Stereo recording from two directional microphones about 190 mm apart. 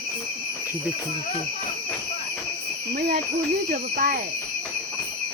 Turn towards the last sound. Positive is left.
turn(degrees=-50)  # may be behind; listen again after turning